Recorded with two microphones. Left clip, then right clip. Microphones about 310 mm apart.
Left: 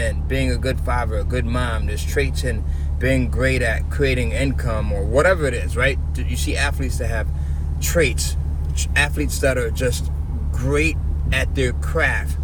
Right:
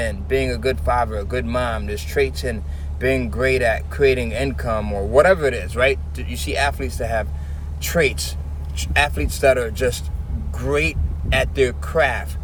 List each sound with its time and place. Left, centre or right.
0.0 s speech: centre